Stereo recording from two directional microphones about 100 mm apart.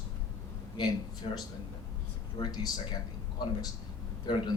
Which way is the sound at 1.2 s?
85° left.